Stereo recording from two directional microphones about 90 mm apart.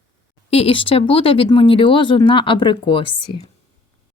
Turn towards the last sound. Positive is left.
turn(degrees=70)  # may be behind; listen again after turning